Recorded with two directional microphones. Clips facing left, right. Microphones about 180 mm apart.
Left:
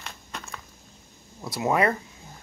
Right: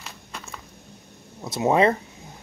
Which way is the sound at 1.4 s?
25° right (ahead or behind).